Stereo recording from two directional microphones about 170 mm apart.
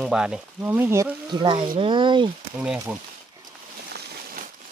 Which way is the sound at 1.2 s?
30° right (ahead or behind).